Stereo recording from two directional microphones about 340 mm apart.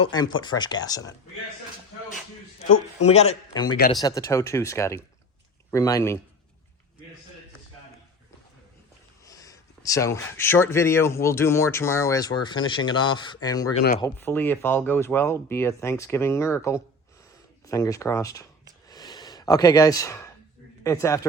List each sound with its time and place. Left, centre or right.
0.0 s speech: centre
3.0 s speech: centre
9.2 s speech: centre
18.9 s a sound: centre
20.8 s speech: centre